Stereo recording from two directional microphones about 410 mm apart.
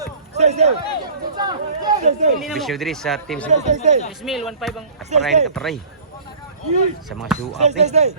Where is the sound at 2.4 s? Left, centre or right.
Centre.